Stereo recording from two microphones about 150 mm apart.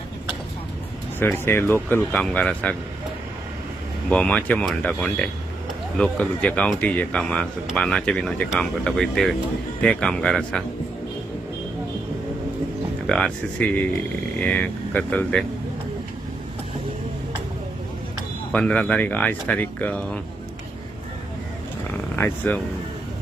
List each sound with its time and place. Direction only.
1.2 s speech: 15° left (ahead or behind)
4.1 s speech: 10° left (ahead or behind)
13.1 s speech: 5° left (ahead or behind)
18.5 s speech: 5° left (ahead or behind)
22.1 s speech: 10° left (ahead or behind)